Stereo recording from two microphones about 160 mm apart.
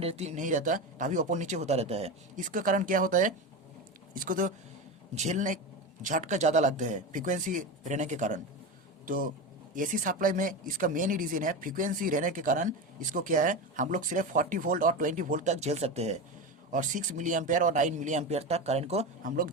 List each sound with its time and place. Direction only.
0.0 s a man's voice: 40° right (ahead or behind)
2.3 s speech: 55° right (ahead or behind)
5.1 s a man's voice: 45° right (ahead or behind)